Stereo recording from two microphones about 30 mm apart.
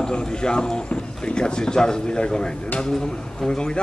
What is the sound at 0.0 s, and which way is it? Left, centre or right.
A man's voice, left.